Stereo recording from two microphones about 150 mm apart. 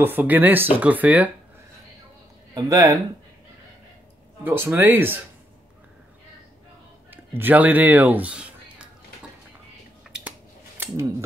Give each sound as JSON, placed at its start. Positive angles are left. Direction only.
{"t": 0.0, "sound": "speech", "side_deg": -10}
{"t": 2.5, "sound": "speech", "side_deg": -20}
{"t": 4.5, "sound": "speech", "side_deg": -15}
{"t": 7.1, "sound": "speech", "side_deg": -15}
{"t": 10.8, "sound": "speech", "side_deg": -20}